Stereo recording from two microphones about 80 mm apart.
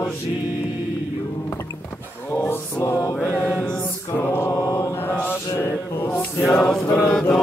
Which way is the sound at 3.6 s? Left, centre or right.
Centre.